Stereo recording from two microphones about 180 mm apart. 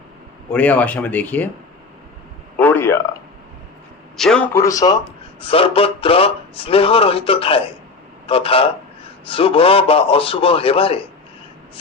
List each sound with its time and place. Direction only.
0.5 s speech: 5° left (ahead or behind)
2.6 s a sound: 10° left (ahead or behind)
4.2 s speech: 5° left (ahead or behind)
5.4 s a man's voice: 30° left (ahead or behind)